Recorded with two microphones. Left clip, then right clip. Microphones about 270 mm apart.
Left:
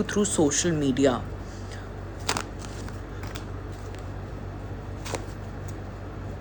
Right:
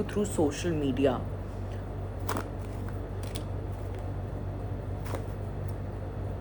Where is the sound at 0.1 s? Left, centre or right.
Left.